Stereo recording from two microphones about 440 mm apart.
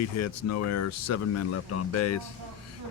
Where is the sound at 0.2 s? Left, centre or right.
Left.